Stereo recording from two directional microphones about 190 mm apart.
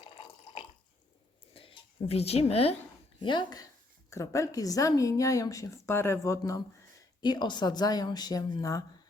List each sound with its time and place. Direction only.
0.0 s water: 30° left (ahead or behind)
1.5 s a woman's voice: 30° left (ahead or behind)